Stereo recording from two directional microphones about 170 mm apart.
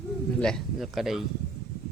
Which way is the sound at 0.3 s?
5° left (ahead or behind).